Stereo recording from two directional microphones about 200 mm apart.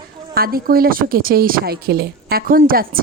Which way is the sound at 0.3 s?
50° right (ahead or behind).